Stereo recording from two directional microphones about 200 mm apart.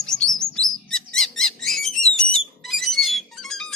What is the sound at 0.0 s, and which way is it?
Bird, 5° left (ahead or behind).